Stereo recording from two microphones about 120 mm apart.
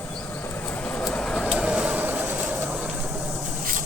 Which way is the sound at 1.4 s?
5° right (ahead or behind).